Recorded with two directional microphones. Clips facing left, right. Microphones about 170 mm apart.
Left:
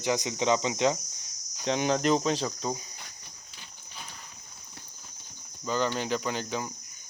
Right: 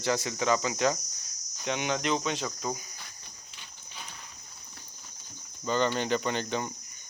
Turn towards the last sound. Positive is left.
turn(degrees=5)  # may be behind; listen again after turning